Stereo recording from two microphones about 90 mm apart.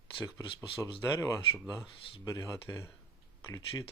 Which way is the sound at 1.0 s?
40° left (ahead or behind).